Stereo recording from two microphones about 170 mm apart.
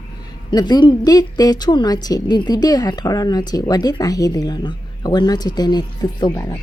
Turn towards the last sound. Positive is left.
turn(degrees=20)  # may be behind; listen again after turning